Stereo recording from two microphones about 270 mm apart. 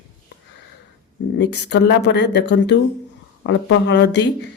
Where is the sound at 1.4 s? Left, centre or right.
Left.